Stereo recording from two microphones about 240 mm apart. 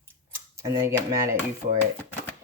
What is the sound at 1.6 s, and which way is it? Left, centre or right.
Speech, right.